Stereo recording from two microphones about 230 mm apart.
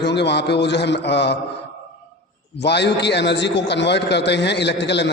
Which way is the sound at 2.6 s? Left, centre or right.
Left.